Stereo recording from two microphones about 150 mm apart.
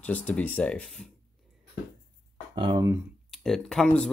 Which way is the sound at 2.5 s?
35° right (ahead or behind).